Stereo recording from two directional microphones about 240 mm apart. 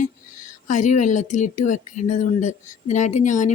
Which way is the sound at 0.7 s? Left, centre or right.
Left.